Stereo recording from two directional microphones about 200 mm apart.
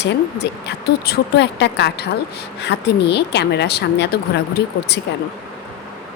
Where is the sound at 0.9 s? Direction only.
55° left (ahead or behind).